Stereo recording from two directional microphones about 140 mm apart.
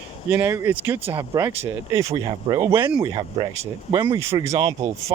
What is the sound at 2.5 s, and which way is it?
Speech, 15° right (ahead or behind).